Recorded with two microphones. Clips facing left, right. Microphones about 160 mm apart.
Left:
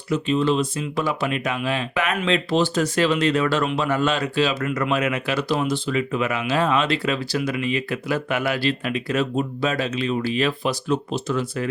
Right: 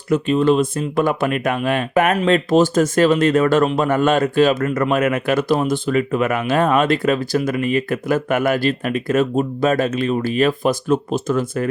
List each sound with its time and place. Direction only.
0.1 s speech: 50° right (ahead or behind)